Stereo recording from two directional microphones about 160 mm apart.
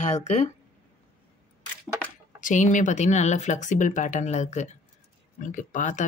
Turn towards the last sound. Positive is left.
turn(degrees=50)  # may be behind; listen again after turning